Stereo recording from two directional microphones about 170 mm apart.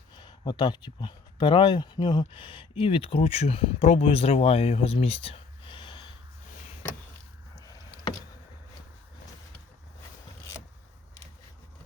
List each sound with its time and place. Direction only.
0.2 s speech: 25° left (ahead or behind)